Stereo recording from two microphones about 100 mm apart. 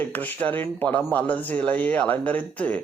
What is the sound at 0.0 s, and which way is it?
A man's voice, 15° left (ahead or behind).